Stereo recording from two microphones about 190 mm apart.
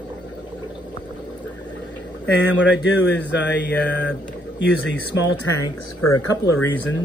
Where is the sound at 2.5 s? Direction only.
70° left (ahead or behind).